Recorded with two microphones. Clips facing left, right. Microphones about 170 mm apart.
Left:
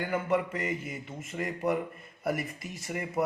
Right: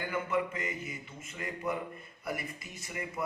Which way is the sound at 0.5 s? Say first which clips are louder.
Left 5 dB; 45° left (ahead or behind).